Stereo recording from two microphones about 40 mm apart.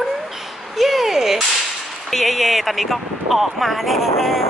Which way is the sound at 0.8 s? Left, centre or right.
Centre.